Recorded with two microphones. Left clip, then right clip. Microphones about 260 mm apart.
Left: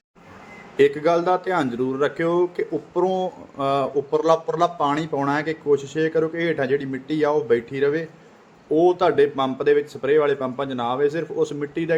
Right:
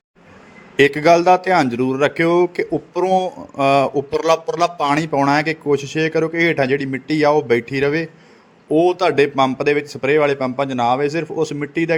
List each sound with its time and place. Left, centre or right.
0.8 s speech: right